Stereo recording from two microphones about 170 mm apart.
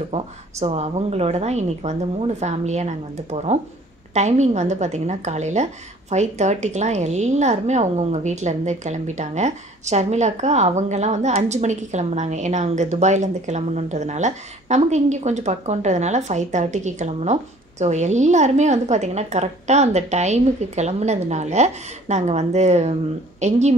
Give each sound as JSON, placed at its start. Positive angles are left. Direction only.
{"t": 0.1, "sound": "a woman's voice", "side_deg": -40}